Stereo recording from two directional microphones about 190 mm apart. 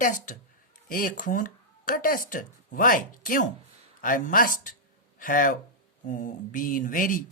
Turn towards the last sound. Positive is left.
turn(degrees=45)  # may be behind; listen again after turning